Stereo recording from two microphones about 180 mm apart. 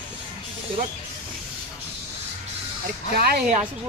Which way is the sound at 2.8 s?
55° right (ahead or behind).